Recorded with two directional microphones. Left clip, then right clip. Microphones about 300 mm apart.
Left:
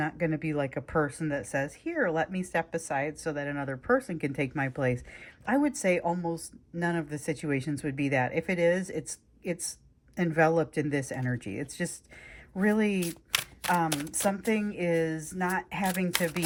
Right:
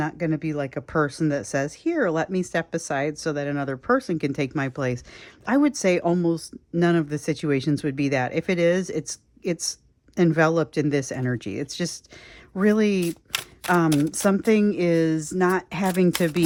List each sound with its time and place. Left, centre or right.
0.0 s speech: centre
10.2 s speech: centre
13.0 s a sound: centre
14.2 s speech: centre